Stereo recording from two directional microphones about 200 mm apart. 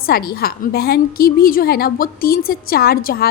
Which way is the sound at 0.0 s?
50° left (ahead or behind).